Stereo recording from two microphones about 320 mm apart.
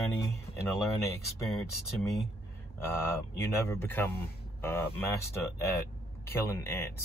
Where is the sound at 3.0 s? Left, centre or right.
Centre.